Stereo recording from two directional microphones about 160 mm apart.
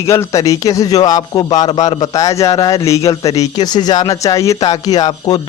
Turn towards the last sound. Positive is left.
turn(degrees=25)  # may be behind; listen again after turning